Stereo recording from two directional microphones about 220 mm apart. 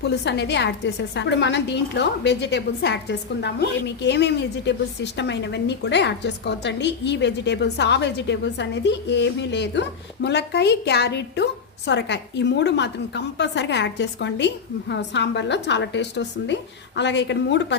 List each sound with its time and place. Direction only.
0.0 s a woman's voice: 50° left (ahead or behind)